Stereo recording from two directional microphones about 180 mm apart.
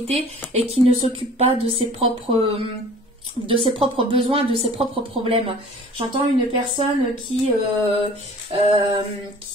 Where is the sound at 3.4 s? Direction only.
30° right (ahead or behind).